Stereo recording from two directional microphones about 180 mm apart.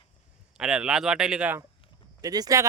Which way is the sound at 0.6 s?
5° right (ahead or behind).